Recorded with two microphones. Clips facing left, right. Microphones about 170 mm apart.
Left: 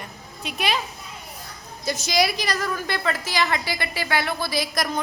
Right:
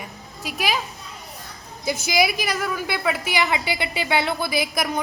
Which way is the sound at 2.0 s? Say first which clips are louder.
Right 1 dB; 5° right (ahead or behind).